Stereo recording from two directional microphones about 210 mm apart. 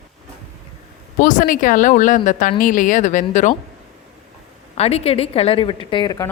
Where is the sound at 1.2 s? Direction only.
40° left (ahead or behind).